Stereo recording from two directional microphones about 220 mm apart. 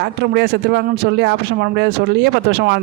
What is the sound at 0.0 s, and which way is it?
A man's voice, 50° right (ahead or behind).